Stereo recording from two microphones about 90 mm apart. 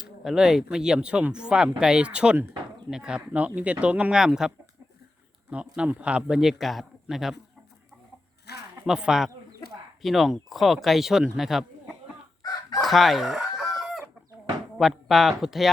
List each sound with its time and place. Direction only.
0.0 s speech: 5° right (ahead or behind)
5.7 s speech: 10° right (ahead or behind)
8.9 s speech: 5° right (ahead or behind)
12.4 s chicken: 45° left (ahead or behind)
12.8 s chicken: centre (ahead or behind)
14.8 s speech: 5° right (ahead or behind)